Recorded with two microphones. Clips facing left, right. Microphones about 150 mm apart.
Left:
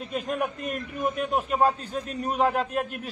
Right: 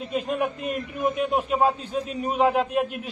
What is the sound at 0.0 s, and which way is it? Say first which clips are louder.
A man's voice: right 3 dB; 5° right (ahead or behind).